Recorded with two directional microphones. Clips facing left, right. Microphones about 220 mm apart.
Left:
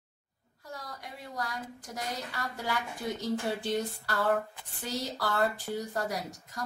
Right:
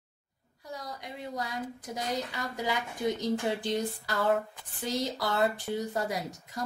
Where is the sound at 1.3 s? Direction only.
20° right (ahead or behind).